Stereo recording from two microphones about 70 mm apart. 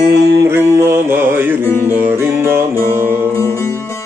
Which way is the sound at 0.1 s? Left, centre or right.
Right.